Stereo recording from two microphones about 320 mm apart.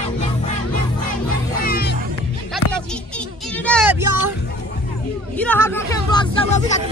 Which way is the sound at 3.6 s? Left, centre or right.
Centre.